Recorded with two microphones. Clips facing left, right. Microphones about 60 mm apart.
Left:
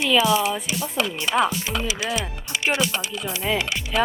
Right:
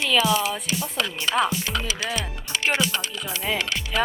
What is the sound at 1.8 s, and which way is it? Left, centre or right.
Speech, centre.